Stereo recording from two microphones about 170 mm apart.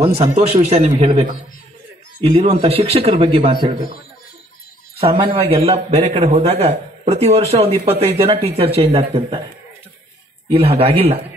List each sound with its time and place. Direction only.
0.2 s a man's voice: 40° right (ahead or behind)
5.0 s a man's voice: 25° right (ahead or behind)
10.5 s a man's voice: 35° right (ahead or behind)